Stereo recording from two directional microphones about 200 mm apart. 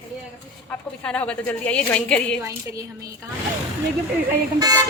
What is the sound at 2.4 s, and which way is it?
Speech, 15° right (ahead or behind).